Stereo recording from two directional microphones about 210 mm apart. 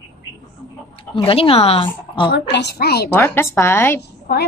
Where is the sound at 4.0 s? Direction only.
50° left (ahead or behind).